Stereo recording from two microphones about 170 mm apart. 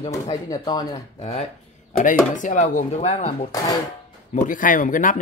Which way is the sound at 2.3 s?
45° left (ahead or behind).